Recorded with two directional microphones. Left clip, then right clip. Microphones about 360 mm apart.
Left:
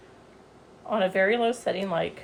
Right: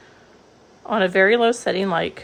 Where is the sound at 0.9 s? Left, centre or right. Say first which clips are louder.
Right 7 dB; right.